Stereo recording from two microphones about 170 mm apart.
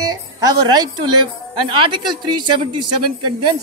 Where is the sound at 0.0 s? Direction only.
20° right (ahead or behind).